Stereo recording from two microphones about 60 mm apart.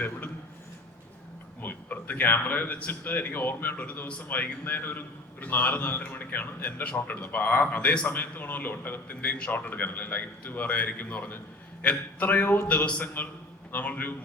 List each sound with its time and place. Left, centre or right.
1.6 s a man's voice: left
12.6 s a man's voice: left